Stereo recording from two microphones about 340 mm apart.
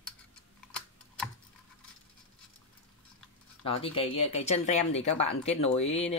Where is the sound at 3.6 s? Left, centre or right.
Centre.